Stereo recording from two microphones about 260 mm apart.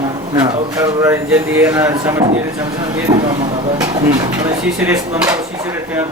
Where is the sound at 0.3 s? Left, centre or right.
Centre.